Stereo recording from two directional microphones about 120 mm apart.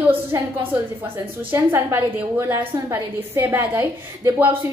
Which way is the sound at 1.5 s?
20° right (ahead or behind).